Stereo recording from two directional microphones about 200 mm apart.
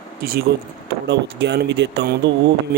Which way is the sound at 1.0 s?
60° right (ahead or behind).